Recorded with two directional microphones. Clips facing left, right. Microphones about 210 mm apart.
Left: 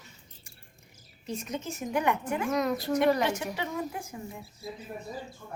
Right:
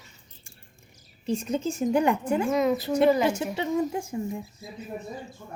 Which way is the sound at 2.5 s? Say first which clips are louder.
Right 2 dB; centre (ahead or behind).